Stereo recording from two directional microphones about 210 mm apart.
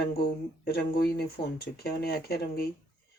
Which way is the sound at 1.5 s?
50° left (ahead or behind).